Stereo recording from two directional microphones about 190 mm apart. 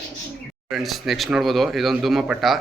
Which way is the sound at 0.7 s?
Centre (ahead or behind).